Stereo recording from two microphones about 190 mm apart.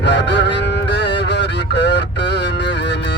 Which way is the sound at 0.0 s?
65° left (ahead or behind).